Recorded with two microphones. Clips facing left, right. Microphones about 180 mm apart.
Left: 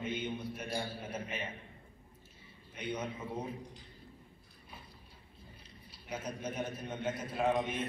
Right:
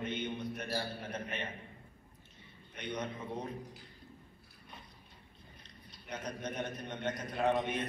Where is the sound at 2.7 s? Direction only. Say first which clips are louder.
Left 1 dB; 10° left (ahead or behind).